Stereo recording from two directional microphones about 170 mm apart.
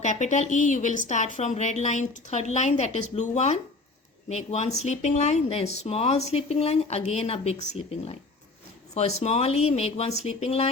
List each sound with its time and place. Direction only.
0.0 s a woman's voice: 45° left (ahead or behind)